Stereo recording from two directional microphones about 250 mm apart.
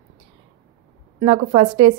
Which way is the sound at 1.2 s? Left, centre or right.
Right.